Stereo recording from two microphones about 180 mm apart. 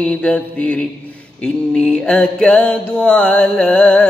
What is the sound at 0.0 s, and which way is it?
Mantra, 5° left (ahead or behind).